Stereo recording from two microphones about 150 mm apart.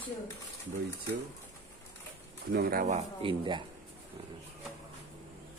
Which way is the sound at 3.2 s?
30° right (ahead or behind).